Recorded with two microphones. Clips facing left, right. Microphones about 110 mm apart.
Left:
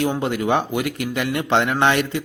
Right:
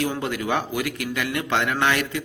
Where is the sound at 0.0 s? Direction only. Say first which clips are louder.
Left 4 dB; 25° left (ahead or behind).